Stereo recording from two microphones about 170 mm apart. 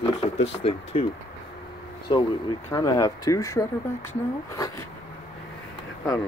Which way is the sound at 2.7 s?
20° left (ahead or behind).